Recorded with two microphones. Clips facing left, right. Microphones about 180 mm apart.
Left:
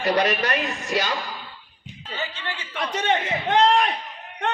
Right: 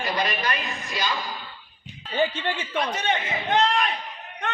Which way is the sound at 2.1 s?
50° right (ahead or behind).